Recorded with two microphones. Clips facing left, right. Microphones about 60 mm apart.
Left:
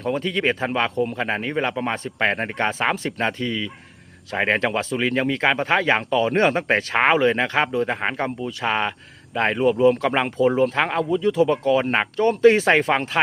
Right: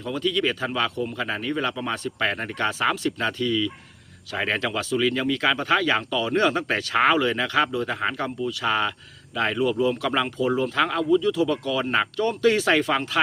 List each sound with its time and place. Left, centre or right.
0.0 s speech: left